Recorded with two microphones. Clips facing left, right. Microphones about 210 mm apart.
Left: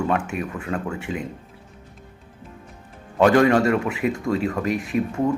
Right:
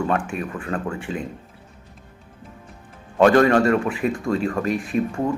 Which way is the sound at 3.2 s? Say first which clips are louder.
Right 1 dB; 10° left (ahead or behind).